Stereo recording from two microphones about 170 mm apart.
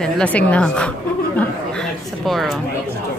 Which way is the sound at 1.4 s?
5° left (ahead or behind).